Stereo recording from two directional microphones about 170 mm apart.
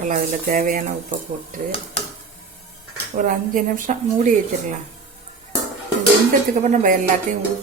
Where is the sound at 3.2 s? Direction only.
50° right (ahead or behind).